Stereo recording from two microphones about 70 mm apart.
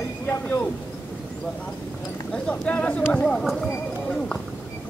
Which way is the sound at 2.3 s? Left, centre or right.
Centre.